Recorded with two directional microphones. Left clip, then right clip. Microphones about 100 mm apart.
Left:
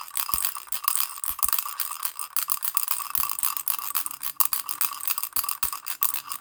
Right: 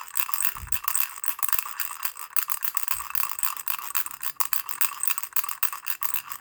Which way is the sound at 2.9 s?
35° left (ahead or behind).